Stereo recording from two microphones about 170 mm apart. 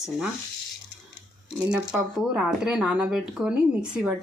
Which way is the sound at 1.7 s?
5° right (ahead or behind).